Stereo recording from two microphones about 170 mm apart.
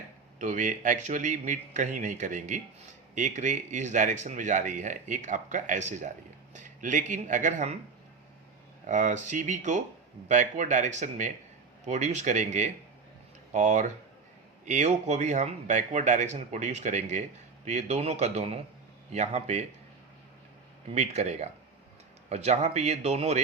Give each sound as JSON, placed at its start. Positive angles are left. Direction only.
{"t": 0.3, "sound": "speech", "side_deg": -45}
{"t": 8.9, "sound": "a man's voice", "side_deg": -45}
{"t": 20.9, "sound": "a man's voice", "side_deg": -40}